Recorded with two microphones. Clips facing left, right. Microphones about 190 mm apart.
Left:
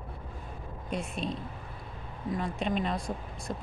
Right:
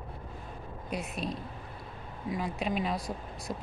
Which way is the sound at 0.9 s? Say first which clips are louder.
Left 1 dB; 5° right (ahead or behind).